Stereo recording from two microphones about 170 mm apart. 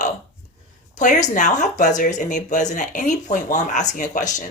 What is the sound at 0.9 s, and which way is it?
Speech, 45° left (ahead or behind).